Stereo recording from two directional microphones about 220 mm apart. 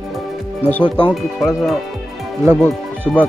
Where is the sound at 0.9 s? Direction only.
5° left (ahead or behind).